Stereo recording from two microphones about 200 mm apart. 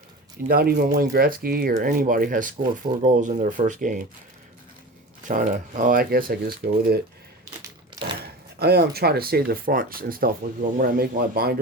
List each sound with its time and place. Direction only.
0.4 s speech: 45° right (ahead or behind)
5.3 s speech: 40° right (ahead or behind)
7.6 s crushing: 25° right (ahead or behind)
8.2 s speech: 50° right (ahead or behind)